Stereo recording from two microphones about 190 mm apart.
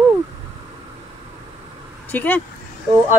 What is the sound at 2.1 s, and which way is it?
Speech, 10° left (ahead or behind).